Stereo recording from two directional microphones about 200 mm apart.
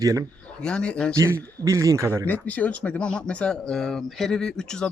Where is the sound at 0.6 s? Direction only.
5° left (ahead or behind).